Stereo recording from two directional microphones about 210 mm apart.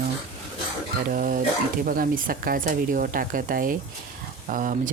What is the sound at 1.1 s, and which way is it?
Speech, 40° right (ahead or behind).